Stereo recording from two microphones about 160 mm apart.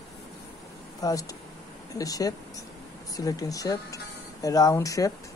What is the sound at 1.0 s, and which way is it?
A woman's voice, 20° left (ahead or behind).